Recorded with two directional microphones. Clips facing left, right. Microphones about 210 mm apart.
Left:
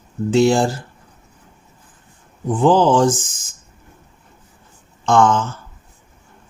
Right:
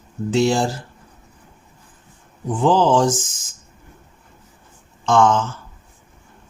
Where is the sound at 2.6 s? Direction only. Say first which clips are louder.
Left 2 dB; 55° left (ahead or behind).